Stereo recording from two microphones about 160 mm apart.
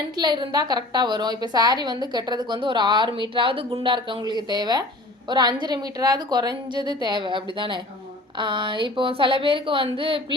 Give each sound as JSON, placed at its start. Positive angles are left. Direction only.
{"t": 0.2, "sound": "a woman's voice", "side_deg": -25}